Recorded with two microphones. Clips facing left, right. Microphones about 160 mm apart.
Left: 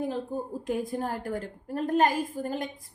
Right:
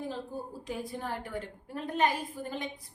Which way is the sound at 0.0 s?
50° left (ahead or behind).